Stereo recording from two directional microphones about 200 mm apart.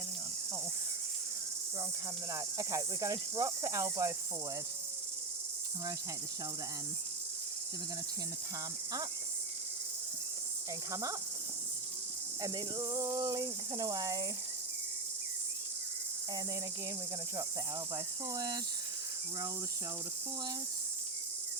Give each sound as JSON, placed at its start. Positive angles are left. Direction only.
{"t": 2.3, "sound": "speech", "side_deg": -15}
{"t": 12.4, "sound": "speech", "side_deg": -20}
{"t": 17.9, "sound": "speech", "side_deg": -20}